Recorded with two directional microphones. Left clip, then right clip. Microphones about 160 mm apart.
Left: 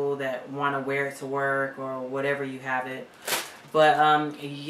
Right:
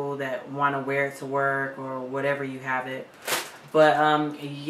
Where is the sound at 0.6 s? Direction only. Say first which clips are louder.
Right 3 dB; 5° left (ahead or behind).